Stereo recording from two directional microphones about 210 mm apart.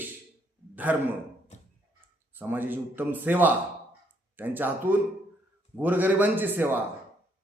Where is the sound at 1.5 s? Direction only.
35° left (ahead or behind).